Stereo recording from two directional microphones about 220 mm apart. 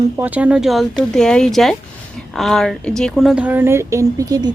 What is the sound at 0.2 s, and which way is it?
A woman's voice, 5° right (ahead or behind).